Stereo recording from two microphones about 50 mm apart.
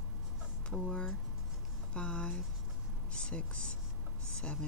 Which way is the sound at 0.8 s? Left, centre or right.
Left.